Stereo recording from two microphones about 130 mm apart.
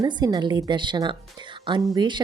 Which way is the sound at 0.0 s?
35° right (ahead or behind).